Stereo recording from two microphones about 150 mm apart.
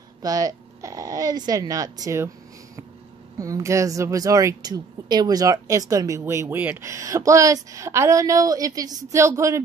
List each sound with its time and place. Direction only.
0.2 s a woman's voice: 25° right (ahead or behind)